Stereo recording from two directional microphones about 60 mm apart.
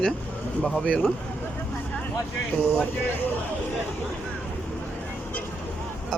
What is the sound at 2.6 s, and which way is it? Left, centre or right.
Speech, left.